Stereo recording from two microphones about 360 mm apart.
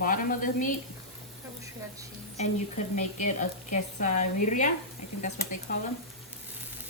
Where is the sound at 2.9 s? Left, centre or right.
Left.